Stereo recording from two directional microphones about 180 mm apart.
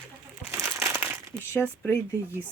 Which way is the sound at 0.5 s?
15° right (ahead or behind).